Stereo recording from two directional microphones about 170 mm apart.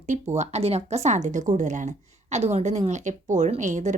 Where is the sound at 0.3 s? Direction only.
40° right (ahead or behind).